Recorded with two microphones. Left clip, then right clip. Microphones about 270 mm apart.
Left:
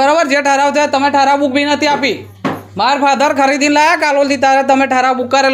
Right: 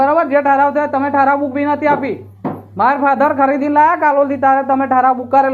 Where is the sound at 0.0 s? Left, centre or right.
Left.